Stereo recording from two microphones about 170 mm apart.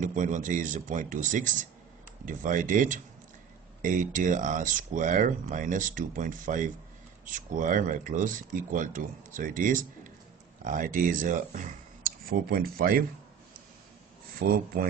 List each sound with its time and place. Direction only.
0.0 s speech: 50° right (ahead or behind)
14.4 s speech: 60° right (ahead or behind)